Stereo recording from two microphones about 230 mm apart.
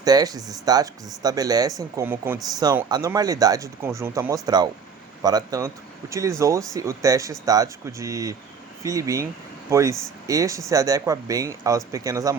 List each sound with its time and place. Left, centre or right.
0.0 s speech: centre